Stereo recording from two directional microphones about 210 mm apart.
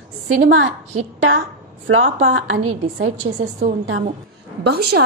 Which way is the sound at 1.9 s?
65° right (ahead or behind).